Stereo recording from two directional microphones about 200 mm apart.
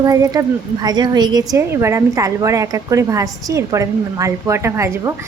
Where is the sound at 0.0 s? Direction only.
20° right (ahead or behind).